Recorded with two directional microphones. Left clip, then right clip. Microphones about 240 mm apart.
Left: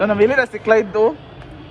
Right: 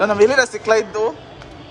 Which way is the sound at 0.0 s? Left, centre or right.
Centre.